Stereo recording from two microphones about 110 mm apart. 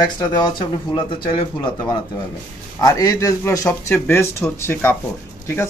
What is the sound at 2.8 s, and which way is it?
Speech, 35° left (ahead or behind).